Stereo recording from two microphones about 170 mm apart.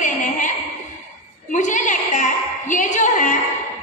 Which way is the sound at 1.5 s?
45° left (ahead or behind).